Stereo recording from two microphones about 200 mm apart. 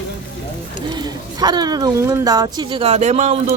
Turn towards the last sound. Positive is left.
turn(degrees=-35)  # may be behind; listen again after turning